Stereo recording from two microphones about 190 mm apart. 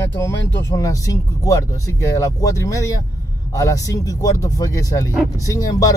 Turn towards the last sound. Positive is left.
turn(degrees=20)  # may be behind; listen again after turning